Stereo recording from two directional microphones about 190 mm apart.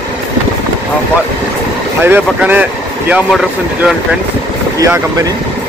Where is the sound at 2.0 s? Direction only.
10° right (ahead or behind).